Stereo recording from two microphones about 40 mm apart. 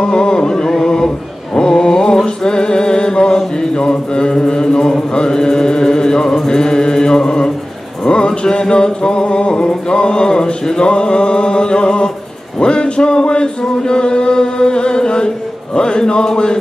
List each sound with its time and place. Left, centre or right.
0.0 s chant: centre
8.0 s music: left
12.5 s a sound: left